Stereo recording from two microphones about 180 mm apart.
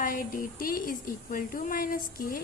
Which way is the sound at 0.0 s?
55° left (ahead or behind).